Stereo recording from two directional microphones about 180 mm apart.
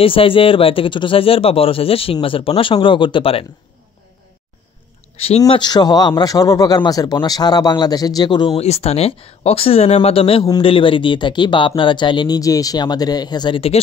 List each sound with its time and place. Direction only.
0.0 s speech: 30° left (ahead or behind)
5.1 s speech: 35° left (ahead or behind)
5.4 s speech: 25° left (ahead or behind)
8.6 s speech: 35° left (ahead or behind)